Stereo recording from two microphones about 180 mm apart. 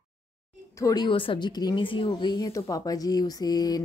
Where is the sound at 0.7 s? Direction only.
20° left (ahead or behind).